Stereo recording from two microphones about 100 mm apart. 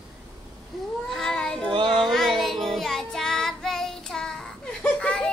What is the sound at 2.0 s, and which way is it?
Child singing, 5° left (ahead or behind).